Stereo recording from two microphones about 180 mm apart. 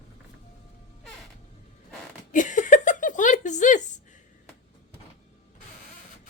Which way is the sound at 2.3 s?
45° left (ahead or behind).